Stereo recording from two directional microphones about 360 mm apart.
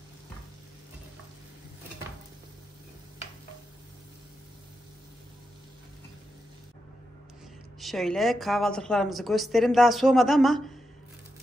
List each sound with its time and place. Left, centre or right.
7.8 s speech: centre